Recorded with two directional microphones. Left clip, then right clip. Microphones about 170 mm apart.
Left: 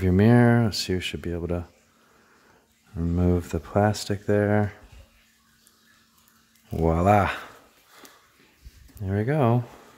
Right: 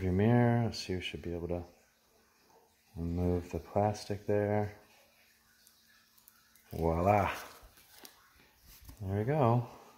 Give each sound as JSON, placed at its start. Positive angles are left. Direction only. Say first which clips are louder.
{"t": 0.0, "sound": "speech", "louder": "left 10 dB", "side_deg": 50}
{"t": 3.0, "sound": "speech", "louder": "left 9 dB", "side_deg": 55}
{"t": 6.7, "sound": "speech", "louder": "left 8 dB", "side_deg": 50}
{"t": 9.0, "sound": "speech", "louder": "left 6 dB", "side_deg": 45}